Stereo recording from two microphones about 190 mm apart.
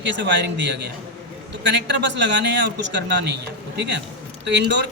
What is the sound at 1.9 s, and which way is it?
Speech, 65° right (ahead or behind).